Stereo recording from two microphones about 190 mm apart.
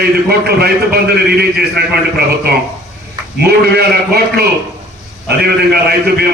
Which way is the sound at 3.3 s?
55° right (ahead or behind).